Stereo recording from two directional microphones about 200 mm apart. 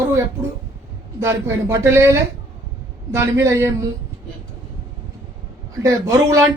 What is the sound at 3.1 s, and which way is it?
Speech, 15° right (ahead or behind).